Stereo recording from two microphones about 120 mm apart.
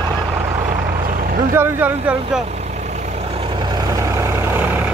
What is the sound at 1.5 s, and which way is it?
Speech, 15° right (ahead or behind).